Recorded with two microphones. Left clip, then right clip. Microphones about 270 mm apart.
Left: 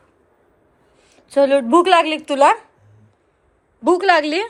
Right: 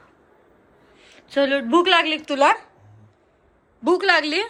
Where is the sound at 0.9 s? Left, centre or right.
Centre.